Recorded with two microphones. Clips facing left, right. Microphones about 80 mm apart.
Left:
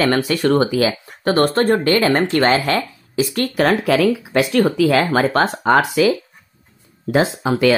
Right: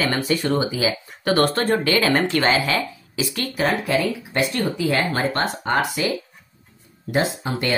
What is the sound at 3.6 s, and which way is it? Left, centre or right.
Speech, left.